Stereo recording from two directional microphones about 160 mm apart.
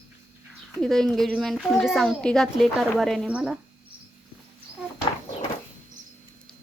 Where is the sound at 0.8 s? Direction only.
Centre (ahead or behind).